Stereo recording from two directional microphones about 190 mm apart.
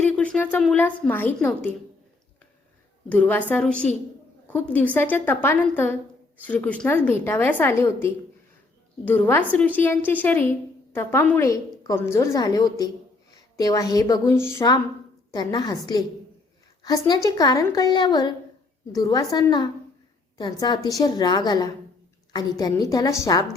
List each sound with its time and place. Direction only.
0.0 s a woman's voice: 5° left (ahead or behind)
3.1 s a woman's voice: 10° left (ahead or behind)